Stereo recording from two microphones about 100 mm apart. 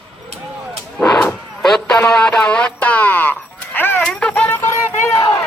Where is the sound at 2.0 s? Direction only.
10° left (ahead or behind); by 5.2 s 25° left (ahead or behind).